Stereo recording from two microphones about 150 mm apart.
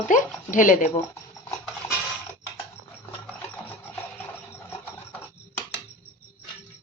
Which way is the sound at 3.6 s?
15° left (ahead or behind).